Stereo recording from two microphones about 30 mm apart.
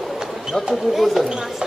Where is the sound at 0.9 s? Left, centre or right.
Centre.